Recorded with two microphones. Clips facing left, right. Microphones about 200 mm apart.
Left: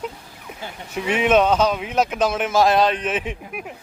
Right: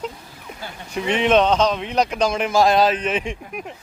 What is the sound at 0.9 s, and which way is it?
Speech, 5° left (ahead or behind).